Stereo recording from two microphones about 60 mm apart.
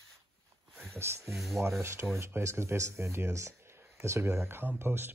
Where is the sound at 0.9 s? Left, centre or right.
Right.